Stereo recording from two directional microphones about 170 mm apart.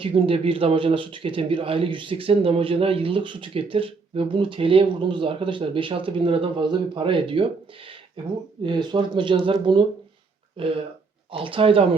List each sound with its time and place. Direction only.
0.0 s speech: 30° right (ahead or behind)
8.6 s speech: 25° right (ahead or behind)